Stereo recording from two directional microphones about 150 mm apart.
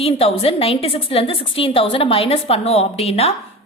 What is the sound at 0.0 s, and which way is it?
A woman's voice, 40° left (ahead or behind).